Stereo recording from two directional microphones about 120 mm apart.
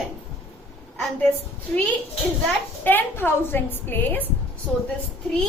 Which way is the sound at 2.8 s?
15° left (ahead or behind).